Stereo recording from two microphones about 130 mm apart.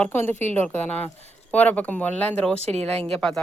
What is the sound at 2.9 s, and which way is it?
Speech, 5° left (ahead or behind).